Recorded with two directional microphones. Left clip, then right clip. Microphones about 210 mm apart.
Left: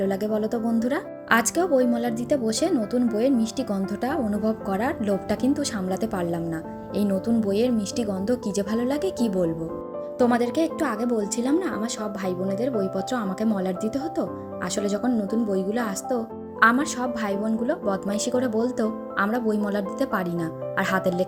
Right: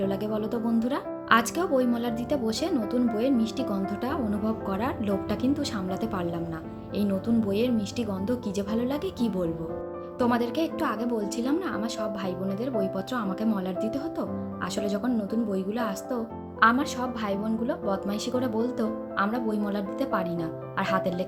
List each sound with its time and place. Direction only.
0.0 s speech: 20° left (ahead or behind)